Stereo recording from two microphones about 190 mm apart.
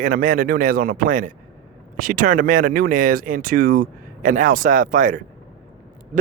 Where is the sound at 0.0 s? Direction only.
45° right (ahead or behind).